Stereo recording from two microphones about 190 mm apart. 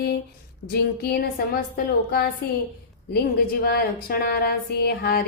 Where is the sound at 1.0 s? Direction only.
55° left (ahead or behind).